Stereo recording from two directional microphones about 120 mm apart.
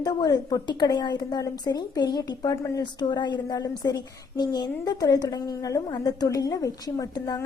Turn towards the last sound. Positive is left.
turn(degrees=35)  # may be behind; listen again after turning